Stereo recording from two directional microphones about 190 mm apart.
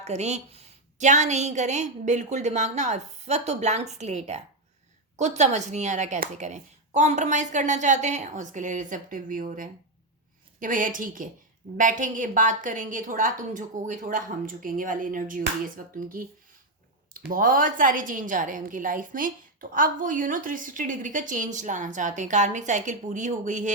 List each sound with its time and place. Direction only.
0.0 s a woman's voice: 35° right (ahead or behind)
17.2 s a woman's voice: 45° right (ahead or behind)